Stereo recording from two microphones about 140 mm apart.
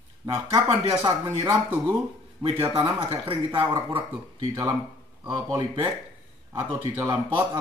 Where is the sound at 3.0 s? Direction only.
40° right (ahead or behind).